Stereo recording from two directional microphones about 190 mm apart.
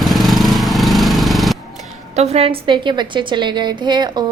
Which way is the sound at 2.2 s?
30° right (ahead or behind).